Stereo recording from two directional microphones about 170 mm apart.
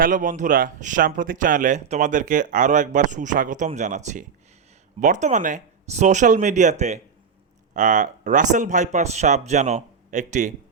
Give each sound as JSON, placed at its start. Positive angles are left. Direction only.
{"t": 0.0, "sound": "speech", "side_deg": -50}